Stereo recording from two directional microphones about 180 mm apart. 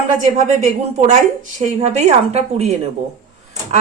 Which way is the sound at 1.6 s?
40° right (ahead or behind).